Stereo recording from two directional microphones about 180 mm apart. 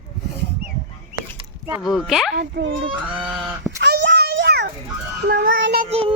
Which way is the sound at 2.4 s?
85° right.